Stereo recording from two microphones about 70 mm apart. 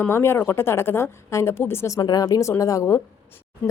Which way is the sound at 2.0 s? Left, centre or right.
Left.